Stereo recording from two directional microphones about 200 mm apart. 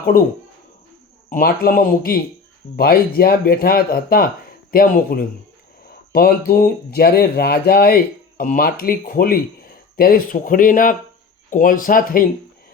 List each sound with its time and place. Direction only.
1.3 s speech: 45° left (ahead or behind)